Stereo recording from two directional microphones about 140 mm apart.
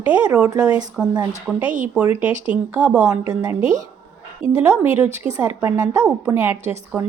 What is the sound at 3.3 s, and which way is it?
A woman's voice, 20° right (ahead or behind).